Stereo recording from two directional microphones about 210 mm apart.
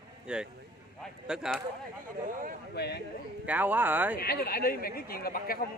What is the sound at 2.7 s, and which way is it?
Speech, 50° left (ahead or behind).